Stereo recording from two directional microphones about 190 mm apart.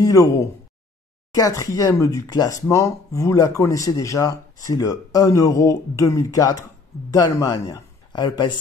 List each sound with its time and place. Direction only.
0.0 s speech: 20° left (ahead or behind)